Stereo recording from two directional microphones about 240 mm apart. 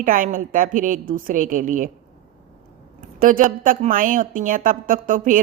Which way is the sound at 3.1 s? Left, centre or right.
Right.